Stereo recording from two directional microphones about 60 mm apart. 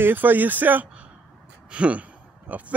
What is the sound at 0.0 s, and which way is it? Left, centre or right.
Speech, right.